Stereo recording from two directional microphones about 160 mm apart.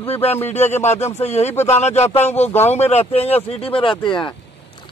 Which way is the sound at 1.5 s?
15° left (ahead or behind).